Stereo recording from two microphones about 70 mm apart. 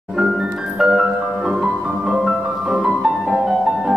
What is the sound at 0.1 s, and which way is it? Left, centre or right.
Music, centre.